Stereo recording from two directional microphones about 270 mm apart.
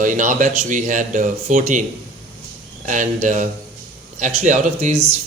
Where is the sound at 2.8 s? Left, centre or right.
Right.